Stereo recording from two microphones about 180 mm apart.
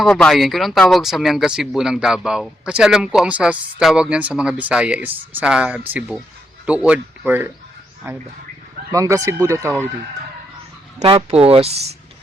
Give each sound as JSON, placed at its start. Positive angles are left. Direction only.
{"t": 0.0, "sound": "speech", "side_deg": 5}
{"t": 11.0, "sound": "speech", "side_deg": -35}